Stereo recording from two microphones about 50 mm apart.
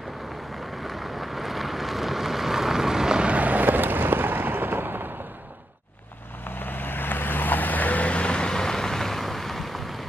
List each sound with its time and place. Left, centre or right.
0.8 s vehicle: centre
3.3 s a sound: right
6.5 s vehicle: left; by 10.0 s centre